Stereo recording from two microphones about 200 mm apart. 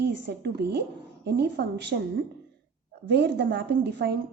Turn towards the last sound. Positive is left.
turn(degrees=-55)  # may be behind; listen again after turning